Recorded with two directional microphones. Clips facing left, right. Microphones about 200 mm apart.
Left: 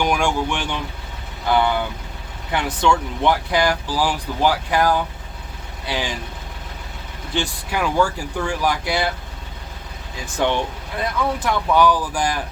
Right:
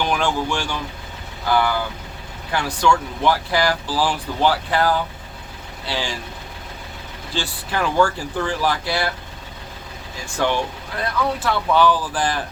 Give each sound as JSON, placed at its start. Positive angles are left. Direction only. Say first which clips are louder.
{"t": 0.0, "sound": "speech", "louder": "left 1 dB", "side_deg": 15}
{"t": 7.3, "sound": "speech", "louder": "left 1 dB", "side_deg": 15}
{"t": 10.3, "sound": "speech", "louder": "left 1 dB", "side_deg": 20}